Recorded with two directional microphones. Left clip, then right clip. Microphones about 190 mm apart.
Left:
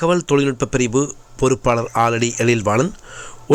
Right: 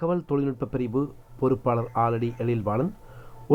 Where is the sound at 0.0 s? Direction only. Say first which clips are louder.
Left 10 dB; 20° left (ahead or behind).